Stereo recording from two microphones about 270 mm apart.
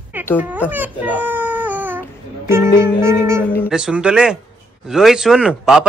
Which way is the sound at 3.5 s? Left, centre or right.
Centre.